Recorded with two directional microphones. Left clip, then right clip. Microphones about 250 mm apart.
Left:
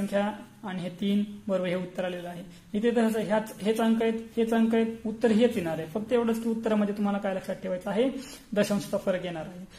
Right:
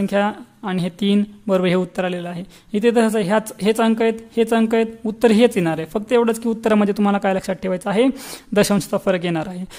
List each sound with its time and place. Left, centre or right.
0.1 s speech: right